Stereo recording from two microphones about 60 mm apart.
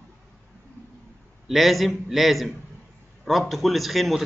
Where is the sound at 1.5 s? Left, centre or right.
Centre.